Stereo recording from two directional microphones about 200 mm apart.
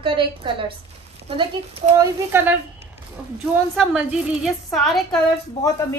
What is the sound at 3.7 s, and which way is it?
A woman's voice, 5° right (ahead or behind).